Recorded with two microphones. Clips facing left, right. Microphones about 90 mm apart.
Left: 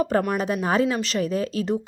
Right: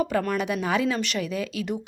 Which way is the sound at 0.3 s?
35° left (ahead or behind).